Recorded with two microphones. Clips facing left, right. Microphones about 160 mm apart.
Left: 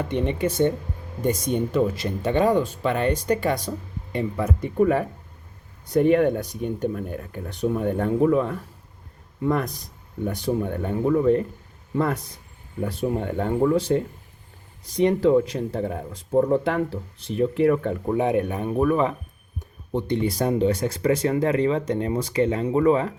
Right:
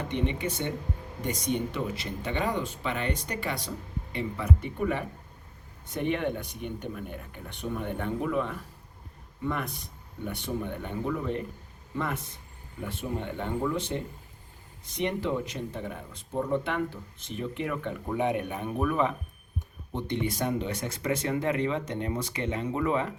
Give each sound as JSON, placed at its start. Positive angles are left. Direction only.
{"t": 0.1, "sound": "speech", "side_deg": 45}
{"t": 14.8, "sound": "speech", "side_deg": 35}